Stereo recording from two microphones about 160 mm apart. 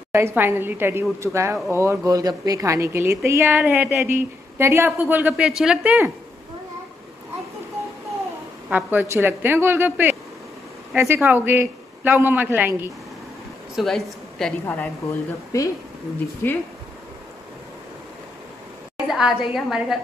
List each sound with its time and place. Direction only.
0.1 s a woman's voice: 15° right (ahead or behind)
8.6 s a woman's voice: 10° right (ahead or behind)
13.7 s a woman's voice: centre (ahead or behind)
15.5 s speech: 20° left (ahead or behind)
19.0 s a woman's voice: 5° right (ahead or behind)